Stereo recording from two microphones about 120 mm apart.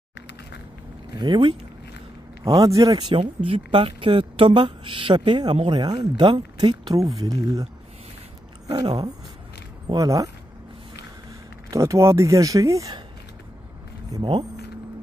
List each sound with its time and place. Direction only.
1.1 s speech: 40° right (ahead or behind)
2.4 s speech: 30° right (ahead or behind)
3.4 s a woman's voice: 50° right (ahead or behind); by 7.6 s 30° right (ahead or behind)
8.6 s speech: 35° right (ahead or behind)
11.7 s speech: 25° right (ahead or behind)